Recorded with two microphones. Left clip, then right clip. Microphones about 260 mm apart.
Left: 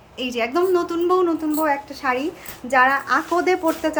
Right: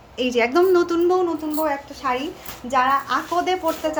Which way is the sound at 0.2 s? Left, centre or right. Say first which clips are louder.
Right 3 dB; centre.